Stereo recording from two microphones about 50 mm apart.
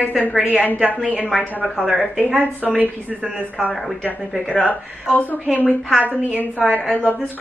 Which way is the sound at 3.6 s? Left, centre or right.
Left.